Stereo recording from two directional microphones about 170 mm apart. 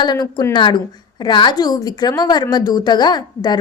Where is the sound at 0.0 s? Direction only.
25° left (ahead or behind).